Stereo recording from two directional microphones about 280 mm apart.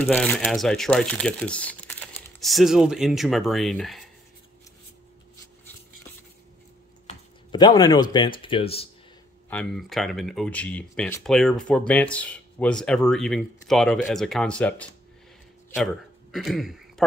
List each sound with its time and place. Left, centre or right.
0.0 s speech: centre
7.1 s speech: centre
9.5 s speech: centre
15.7 s a sound: centre